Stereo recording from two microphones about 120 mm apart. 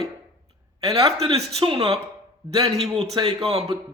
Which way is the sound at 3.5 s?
55° right (ahead or behind).